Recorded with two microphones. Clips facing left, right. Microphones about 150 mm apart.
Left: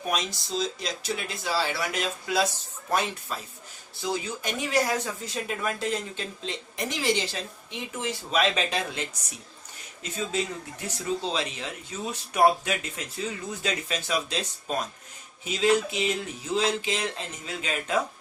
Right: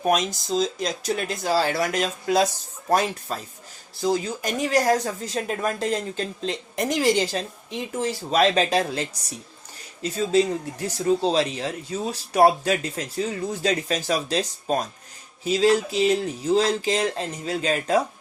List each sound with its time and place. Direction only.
0.0 s speech: 45° right (ahead or behind)